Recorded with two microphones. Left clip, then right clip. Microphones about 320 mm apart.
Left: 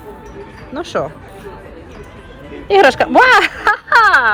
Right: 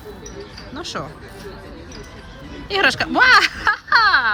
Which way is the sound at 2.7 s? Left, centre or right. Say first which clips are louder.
Left 8 dB; centre.